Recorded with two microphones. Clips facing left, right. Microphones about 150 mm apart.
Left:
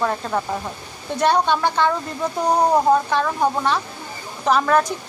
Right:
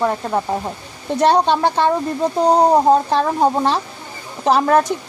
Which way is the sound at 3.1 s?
35° right (ahead or behind).